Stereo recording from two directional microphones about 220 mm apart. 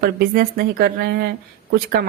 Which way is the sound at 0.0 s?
45° right (ahead or behind).